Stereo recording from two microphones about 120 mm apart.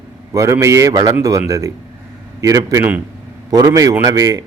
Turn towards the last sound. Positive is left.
turn(degrees=-30)  # may be behind; listen again after turning